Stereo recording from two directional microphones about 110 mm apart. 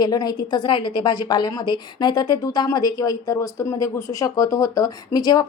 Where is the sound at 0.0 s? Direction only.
35° left (ahead or behind).